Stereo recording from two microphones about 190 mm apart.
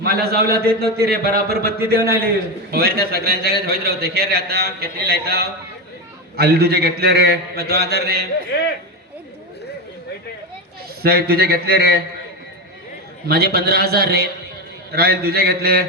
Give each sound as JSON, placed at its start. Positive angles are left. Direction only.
{"t": 0.0, "sound": "a man's voice", "side_deg": -55}
{"t": 8.5, "sound": "speech", "side_deg": 65}
{"t": 11.0, "sound": "a man's voice", "side_deg": -55}
{"t": 13.2, "sound": "a man's voice", "side_deg": -55}